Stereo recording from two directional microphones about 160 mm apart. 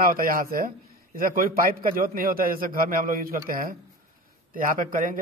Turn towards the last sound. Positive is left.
turn(degrees=-55)  # may be behind; listen again after turning